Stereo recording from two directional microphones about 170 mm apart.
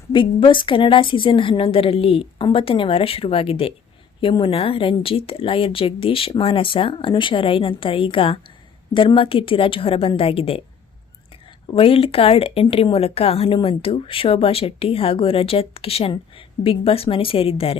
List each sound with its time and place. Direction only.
0.1 s speech: 30° left (ahead or behind)
11.7 s speech: 35° left (ahead or behind)